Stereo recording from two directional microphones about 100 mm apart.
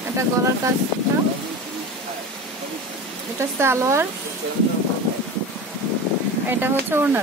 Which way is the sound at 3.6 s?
25° right (ahead or behind).